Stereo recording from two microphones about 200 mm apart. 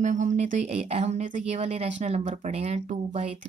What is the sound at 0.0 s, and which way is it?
Speech, 35° right (ahead or behind).